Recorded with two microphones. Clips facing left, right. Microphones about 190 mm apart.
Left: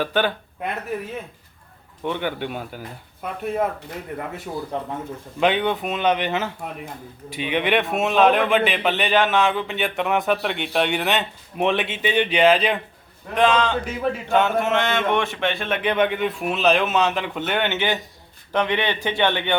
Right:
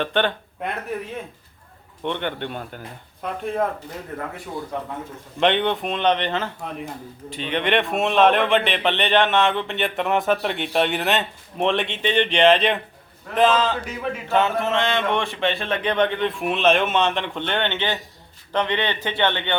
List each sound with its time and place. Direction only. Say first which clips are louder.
0.0 s a man's voice: even; 5° left (ahead or behind)
4.7 s speech: left 1 dB; 30° left (ahead or behind)
5.4 s a man's voice: even; 5° left (ahead or behind)